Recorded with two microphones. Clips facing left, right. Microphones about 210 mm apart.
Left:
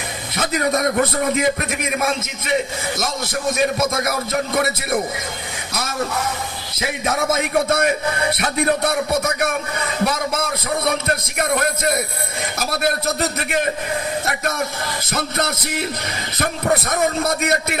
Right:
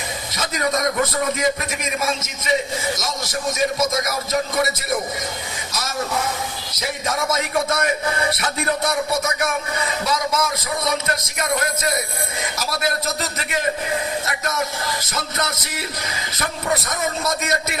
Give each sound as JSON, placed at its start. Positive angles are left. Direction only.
{"t": 0.3, "sound": "a man's voice", "side_deg": 60}
{"t": 6.7, "sound": "a man's voice", "side_deg": 60}